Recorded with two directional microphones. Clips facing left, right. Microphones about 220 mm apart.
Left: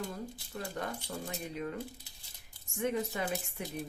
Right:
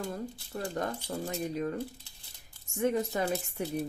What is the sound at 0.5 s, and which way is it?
Speech, 40° right (ahead or behind).